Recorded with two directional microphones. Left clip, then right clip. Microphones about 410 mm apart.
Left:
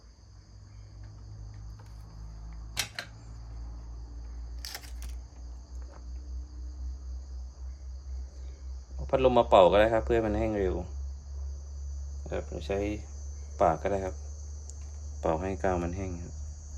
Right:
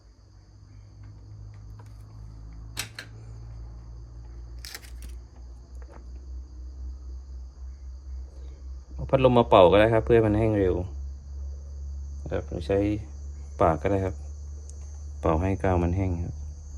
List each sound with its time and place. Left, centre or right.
9.0 s speech: centre
12.3 s speech: centre
15.2 s speech: centre